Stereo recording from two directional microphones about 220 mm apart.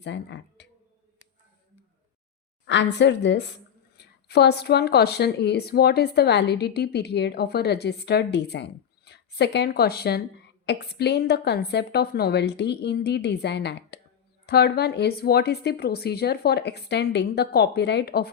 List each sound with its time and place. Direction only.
0.0 s speech: 55° left (ahead or behind)
2.6 s speech: 55° left (ahead or behind)